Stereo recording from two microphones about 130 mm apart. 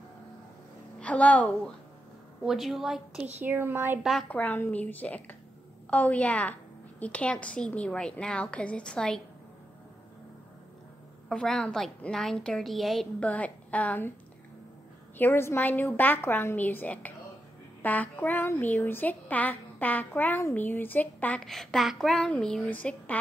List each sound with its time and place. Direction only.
0.9 s a woman's voice: 10° left (ahead or behind)
2.4 s a woman's voice: centre (ahead or behind)
3.3 s speech: 15° right (ahead or behind)
4.0 s a woman's voice: centre (ahead or behind)
4.3 s speech: 15° left (ahead or behind)
11.2 s a woman's voice: 5° left (ahead or behind)
15.1 s speech: 15° left (ahead or behind)
21.5 s a woman's voice: centre (ahead or behind)